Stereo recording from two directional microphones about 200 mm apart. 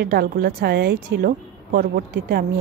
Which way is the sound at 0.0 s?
50° right (ahead or behind).